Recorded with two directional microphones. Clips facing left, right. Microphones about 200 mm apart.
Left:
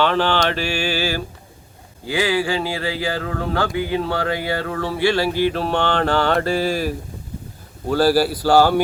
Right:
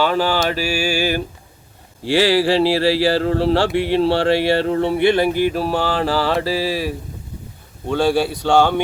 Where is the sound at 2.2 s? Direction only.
35° right (ahead or behind).